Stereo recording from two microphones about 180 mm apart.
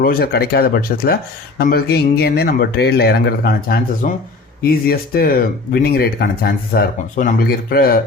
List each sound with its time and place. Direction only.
0.0 s speech: 55° left (ahead or behind)